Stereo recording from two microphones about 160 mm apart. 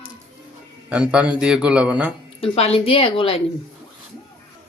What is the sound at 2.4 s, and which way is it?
Speech, 40° left (ahead or behind).